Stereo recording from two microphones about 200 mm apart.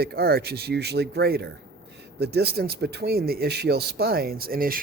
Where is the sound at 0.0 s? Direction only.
50° right (ahead or behind).